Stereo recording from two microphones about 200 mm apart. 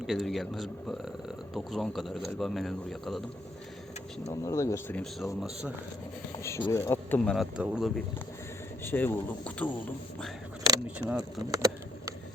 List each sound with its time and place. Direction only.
0.0 s a man's voice: centre (ahead or behind)
4.3 s speech: 15° left (ahead or behind); by 5.7 s centre (ahead or behind)
6.3 s speech: 15° left (ahead or behind)
7.3 s a man's voice: 5° right (ahead or behind)
8.8 s speech: 10° left (ahead or behind)
11.2 s a sound: 20° right (ahead or behind)